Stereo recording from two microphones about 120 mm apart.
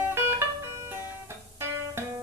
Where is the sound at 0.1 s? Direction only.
20° right (ahead or behind).